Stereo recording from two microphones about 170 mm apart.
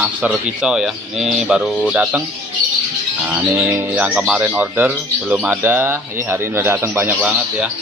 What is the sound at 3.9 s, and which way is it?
Speech, 5° right (ahead or behind).